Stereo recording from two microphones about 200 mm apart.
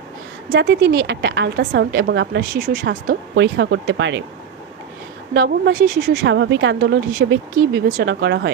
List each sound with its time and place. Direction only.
0.5 s a woman's voice: 55° right (ahead or behind)
5.3 s a woman's voice: 60° right (ahead or behind)